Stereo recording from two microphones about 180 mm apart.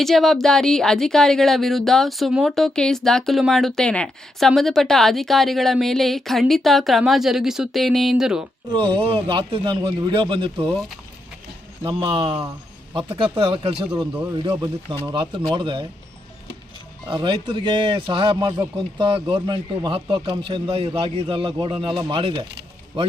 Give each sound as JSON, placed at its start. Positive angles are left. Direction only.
{"t": 0.0, "sound": "speech", "side_deg": 0}
{"t": 8.7, "sound": "speech", "side_deg": -30}
{"t": 11.8, "sound": "speech", "side_deg": -25}
{"t": 17.1, "sound": "speech", "side_deg": -25}